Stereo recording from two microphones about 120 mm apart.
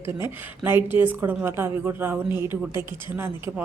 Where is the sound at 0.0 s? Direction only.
20° right (ahead or behind).